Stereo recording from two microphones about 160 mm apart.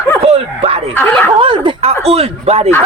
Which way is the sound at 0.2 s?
35° right (ahead or behind).